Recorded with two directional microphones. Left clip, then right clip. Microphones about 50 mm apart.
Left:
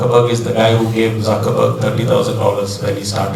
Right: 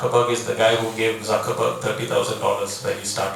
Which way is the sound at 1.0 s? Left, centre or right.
Left.